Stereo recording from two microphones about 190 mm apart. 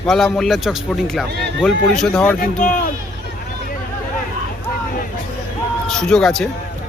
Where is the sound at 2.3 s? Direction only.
50° left (ahead or behind).